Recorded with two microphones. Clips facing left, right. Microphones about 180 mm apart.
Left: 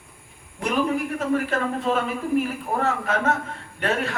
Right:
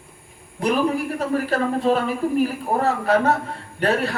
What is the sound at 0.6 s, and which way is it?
A man's voice, 35° right (ahead or behind).